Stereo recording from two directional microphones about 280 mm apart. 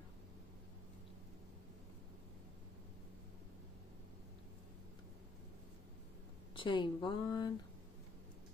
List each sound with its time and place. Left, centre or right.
6.5 s speech: centre